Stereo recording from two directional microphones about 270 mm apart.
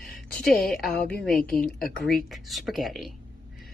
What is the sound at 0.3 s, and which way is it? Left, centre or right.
Speech, centre.